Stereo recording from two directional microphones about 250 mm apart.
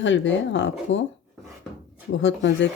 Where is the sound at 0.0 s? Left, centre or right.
Left.